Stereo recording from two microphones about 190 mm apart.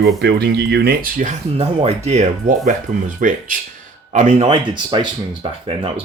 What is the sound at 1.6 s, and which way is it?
Speech, 35° right (ahead or behind).